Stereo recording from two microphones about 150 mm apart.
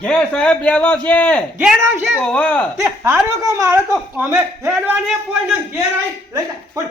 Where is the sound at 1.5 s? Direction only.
10° right (ahead or behind).